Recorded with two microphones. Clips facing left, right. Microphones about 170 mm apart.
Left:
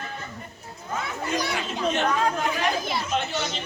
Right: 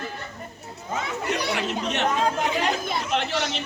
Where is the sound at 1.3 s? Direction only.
70° right (ahead or behind).